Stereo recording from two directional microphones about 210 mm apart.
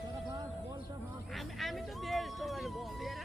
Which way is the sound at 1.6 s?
Centre (ahead or behind).